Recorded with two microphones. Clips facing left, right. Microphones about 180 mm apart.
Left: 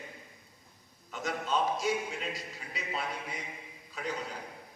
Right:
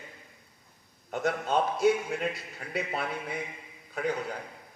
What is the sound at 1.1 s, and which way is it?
A man's voice, 55° right (ahead or behind).